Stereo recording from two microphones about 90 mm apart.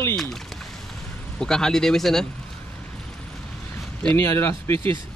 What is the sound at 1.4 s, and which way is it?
Speech, 5° left (ahead or behind).